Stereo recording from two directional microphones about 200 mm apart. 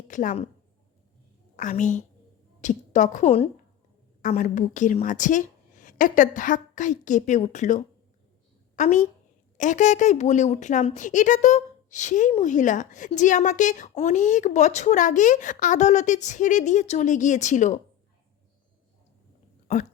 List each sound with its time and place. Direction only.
0.1 s speech: 40° left (ahead or behind)
1.5 s a woman's voice: 40° left (ahead or behind)